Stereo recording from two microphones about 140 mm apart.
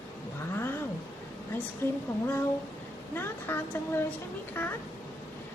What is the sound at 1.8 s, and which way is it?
Speech, 15° left (ahead or behind).